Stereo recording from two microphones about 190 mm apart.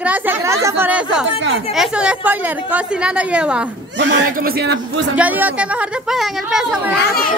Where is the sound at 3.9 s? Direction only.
65° right (ahead or behind).